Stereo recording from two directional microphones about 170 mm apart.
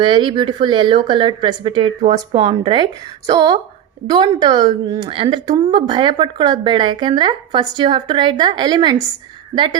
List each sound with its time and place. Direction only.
0.0 s a woman's voice: 30° right (ahead or behind)